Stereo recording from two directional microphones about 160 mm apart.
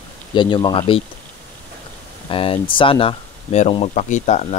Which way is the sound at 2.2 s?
35° left (ahead or behind).